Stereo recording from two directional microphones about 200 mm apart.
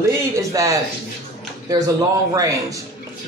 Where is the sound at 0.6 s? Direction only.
15° right (ahead or behind).